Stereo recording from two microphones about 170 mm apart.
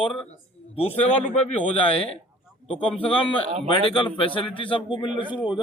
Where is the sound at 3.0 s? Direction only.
30° left (ahead or behind).